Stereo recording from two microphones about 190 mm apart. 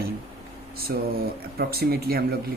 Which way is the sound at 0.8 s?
50° right (ahead or behind).